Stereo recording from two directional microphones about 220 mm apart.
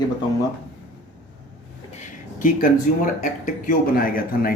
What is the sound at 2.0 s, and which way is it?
Speech, 35° left (ahead or behind).